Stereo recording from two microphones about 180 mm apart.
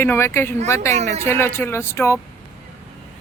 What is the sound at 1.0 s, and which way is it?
Speech, 40° right (ahead or behind).